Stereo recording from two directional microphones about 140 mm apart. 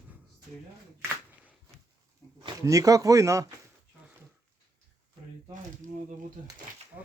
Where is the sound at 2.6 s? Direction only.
25° right (ahead or behind).